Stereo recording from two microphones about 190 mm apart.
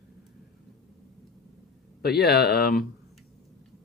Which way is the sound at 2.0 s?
55° left (ahead or behind).